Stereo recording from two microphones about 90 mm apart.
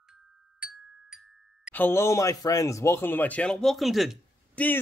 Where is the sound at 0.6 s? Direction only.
10° right (ahead or behind).